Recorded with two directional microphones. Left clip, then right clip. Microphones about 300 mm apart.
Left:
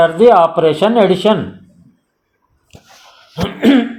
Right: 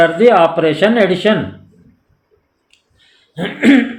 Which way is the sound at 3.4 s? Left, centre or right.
Centre.